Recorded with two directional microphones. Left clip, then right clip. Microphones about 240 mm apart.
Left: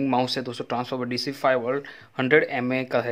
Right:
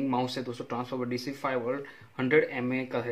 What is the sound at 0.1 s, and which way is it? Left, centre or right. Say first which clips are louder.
Speech: left 6 dB; left.